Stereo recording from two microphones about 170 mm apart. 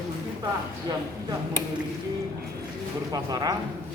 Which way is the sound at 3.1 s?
20° right (ahead or behind).